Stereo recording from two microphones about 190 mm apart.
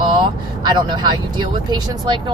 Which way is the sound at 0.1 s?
25° right (ahead or behind).